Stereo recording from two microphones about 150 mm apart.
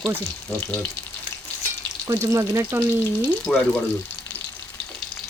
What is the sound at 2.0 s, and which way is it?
Speech, 20° right (ahead or behind).